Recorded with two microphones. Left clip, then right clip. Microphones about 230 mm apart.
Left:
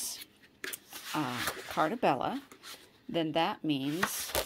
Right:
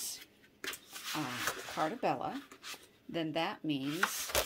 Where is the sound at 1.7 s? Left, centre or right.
Left.